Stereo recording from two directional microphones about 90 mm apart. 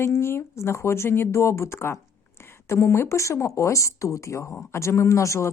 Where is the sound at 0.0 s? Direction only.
30° left (ahead or behind).